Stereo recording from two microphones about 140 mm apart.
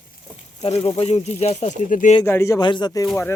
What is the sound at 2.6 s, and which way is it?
Speech, 30° left (ahead or behind).